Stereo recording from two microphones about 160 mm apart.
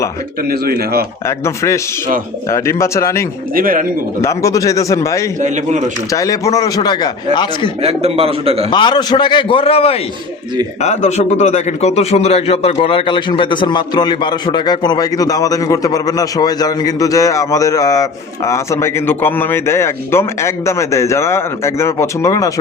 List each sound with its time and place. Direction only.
0.4 s speech: 70° right (ahead or behind)
1.5 s a man's voice: 20° left (ahead or behind)
3.5 s speech: 60° right (ahead or behind)
4.2 s a man's voice: 20° left (ahead or behind)
7.8 s a man's voice: 40° right (ahead or behind)
8.7 s a man's voice: 25° left (ahead or behind)